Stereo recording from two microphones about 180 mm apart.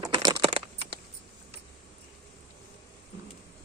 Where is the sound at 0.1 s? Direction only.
25° right (ahead or behind).